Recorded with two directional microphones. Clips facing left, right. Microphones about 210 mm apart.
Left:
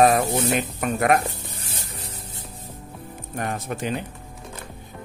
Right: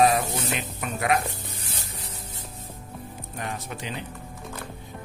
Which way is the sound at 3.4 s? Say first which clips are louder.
Left 6 dB; 50° left (ahead or behind).